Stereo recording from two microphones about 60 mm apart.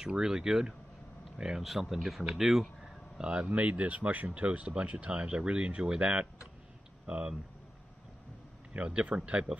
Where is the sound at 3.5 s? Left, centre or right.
Right.